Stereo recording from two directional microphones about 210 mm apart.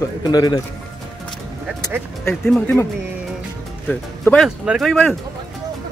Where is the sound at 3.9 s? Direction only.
Centre (ahead or behind).